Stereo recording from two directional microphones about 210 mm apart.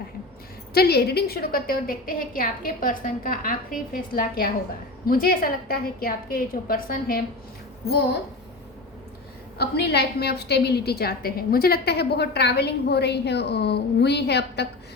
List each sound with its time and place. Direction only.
0.7 s a woman's voice: 50° left (ahead or behind)
9.6 s a woman's voice: 50° left (ahead or behind)